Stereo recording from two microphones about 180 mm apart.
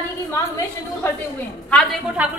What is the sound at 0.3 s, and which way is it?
Speech, 15° left (ahead or behind).